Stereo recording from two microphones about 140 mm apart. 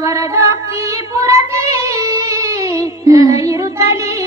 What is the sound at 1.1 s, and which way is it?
Child singing, 25° right (ahead or behind).